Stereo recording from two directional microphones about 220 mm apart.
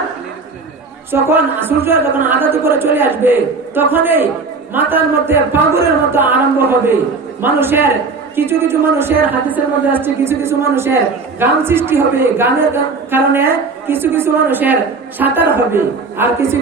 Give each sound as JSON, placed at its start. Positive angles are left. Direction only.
{"t": 1.1, "sound": "a woman's voice", "side_deg": -10}